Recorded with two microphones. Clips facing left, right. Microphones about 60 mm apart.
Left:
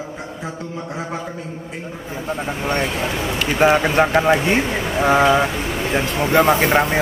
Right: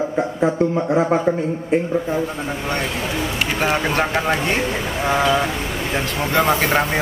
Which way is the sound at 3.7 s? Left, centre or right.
Centre.